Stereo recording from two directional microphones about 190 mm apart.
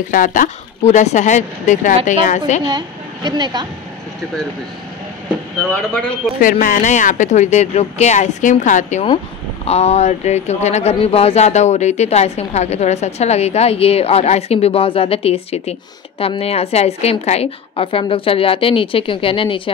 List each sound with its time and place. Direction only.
0.1 s speech: 45° left (ahead or behind)
3.3 s speech: 25° right (ahead or behind)
6.4 s a woman's voice: 45° left (ahead or behind); by 19.7 s 25° left (ahead or behind)